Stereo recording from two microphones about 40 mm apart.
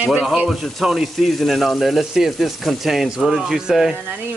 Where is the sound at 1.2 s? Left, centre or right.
Centre.